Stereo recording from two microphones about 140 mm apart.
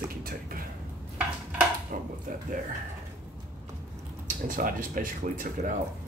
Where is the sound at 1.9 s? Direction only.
70° right (ahead or behind).